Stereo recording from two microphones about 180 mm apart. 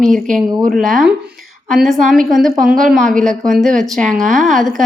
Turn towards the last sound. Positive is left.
turn(degrees=0)  # may be behind; listen again after turning